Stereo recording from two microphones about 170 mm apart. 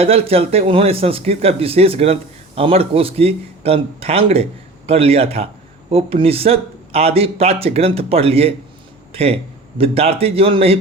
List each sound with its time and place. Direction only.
0.0 s speech: 35° right (ahead or behind)